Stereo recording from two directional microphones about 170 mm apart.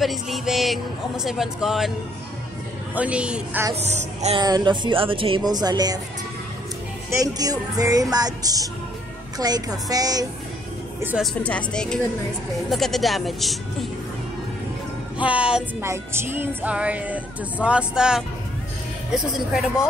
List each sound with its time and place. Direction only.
0.0 s speech: centre (ahead or behind)
2.9 s speech: 5° right (ahead or behind)
3.8 s speech: 40° right (ahead or behind)
4.4 s speech: 25° right (ahead or behind)
7.1 s speech: 20° right (ahead or behind)
11.0 s speech: 10° right (ahead or behind)
11.4 s speech: 5° left (ahead or behind)
15.2 s speech: 5° right (ahead or behind)